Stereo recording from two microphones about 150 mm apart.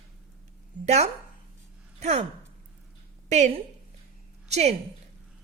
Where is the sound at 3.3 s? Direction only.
50° right (ahead or behind).